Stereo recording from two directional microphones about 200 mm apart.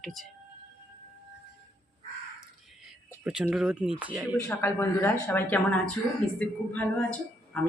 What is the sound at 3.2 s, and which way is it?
Speech, 5° right (ahead or behind).